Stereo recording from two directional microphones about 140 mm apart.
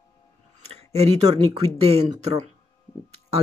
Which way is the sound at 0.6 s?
50° right (ahead or behind).